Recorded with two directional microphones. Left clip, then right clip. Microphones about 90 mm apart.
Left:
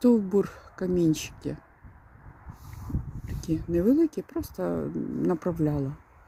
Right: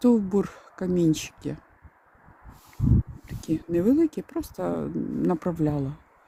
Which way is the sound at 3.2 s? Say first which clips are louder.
Even; 55° right (ahead or behind).